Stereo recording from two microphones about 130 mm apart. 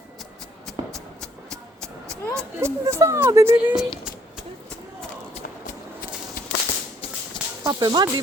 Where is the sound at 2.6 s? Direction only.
20° right (ahead or behind).